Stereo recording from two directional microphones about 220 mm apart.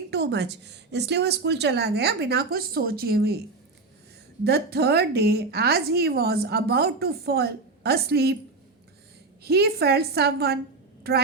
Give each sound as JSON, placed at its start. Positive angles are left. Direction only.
{"t": 0.1, "sound": "a woman's voice", "side_deg": -50}
{"t": 4.4, "sound": "a woman's voice", "side_deg": -45}
{"t": 9.4, "sound": "a woman's voice", "side_deg": -45}